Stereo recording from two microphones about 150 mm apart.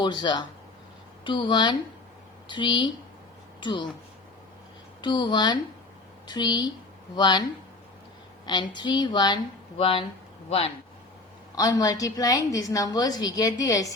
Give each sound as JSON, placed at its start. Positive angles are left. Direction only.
{"t": 0.0, "sound": "a woman's voice", "side_deg": 30}
{"t": 4.9, "sound": "a woman's voice", "side_deg": 30}
{"t": 8.4, "sound": "a woman's voice", "side_deg": 30}
{"t": 11.5, "sound": "a woman's voice", "side_deg": 25}